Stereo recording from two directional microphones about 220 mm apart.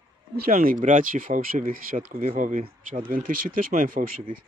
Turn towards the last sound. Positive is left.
turn(degrees=-35)  # may be behind; listen again after turning